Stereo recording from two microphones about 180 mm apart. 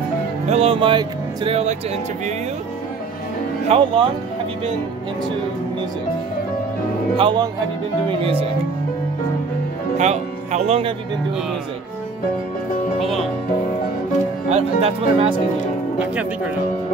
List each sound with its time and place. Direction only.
0.5 s speech: 35° right (ahead or behind)
3.6 s speech: 30° right (ahead or behind)
7.2 s speech: 30° right (ahead or behind)
9.9 s speech: 40° right (ahead or behind)
13.0 s speech: centre (ahead or behind)
14.5 s speech: 30° right (ahead or behind)